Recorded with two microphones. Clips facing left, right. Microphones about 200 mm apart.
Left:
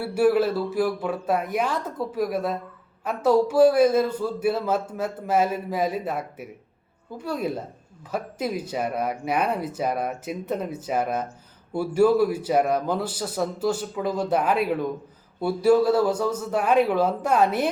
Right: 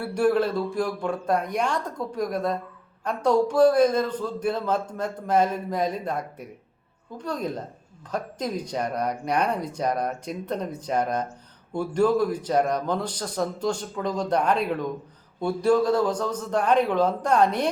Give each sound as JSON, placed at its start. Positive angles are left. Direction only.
{"t": 0.0, "sound": "a man's voice", "side_deg": 5}